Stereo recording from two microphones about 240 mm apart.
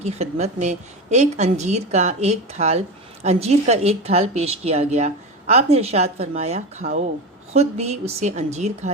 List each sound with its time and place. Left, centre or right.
0.0 s a woman's voice: right